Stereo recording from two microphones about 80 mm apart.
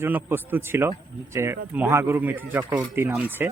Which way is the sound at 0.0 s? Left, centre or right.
Right.